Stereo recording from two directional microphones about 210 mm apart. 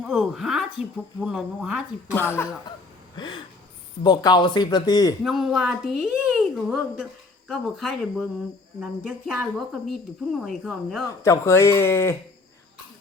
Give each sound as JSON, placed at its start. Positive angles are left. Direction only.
{"t": 0.0, "sound": "a woman's voice", "side_deg": 0}
{"t": 2.1, "sound": "speech", "side_deg": 10}
{"t": 3.2, "sound": "speech", "side_deg": 20}
{"t": 5.2, "sound": "a woman's voice", "side_deg": 0}
{"t": 11.2, "sound": "speech", "side_deg": 15}